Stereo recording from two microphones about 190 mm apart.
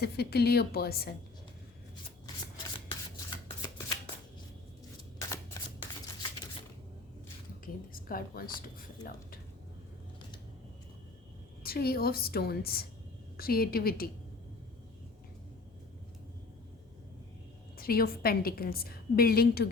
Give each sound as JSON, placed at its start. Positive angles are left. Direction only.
{"t": 0.0, "sound": "speech", "side_deg": 55}
{"t": 3.2, "sound": "shuffling cards", "side_deg": 25}
{"t": 7.6, "sound": "a sound", "side_deg": 50}
{"t": 11.6, "sound": "a woman's voice", "side_deg": 55}
{"t": 17.7, "sound": "a woman's voice", "side_deg": 50}